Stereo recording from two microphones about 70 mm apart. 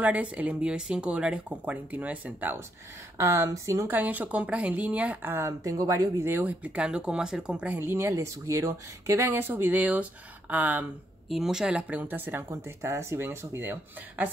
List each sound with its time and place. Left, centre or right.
0.0 s speech: right
1.6 s speech: right
3.2 s speech: right
3.8 s speech: right
5.6 s speech: right
6.2 s speech: right
7.7 s speech: right
11.2 s speech: centre
11.9 s speech: right